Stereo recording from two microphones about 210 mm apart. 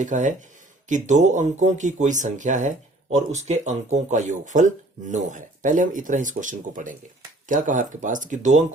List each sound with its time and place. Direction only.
0.0 s speech: 35° right (ahead or behind)